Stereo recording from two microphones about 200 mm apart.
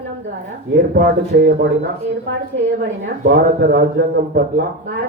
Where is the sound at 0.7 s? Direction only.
50° right (ahead or behind).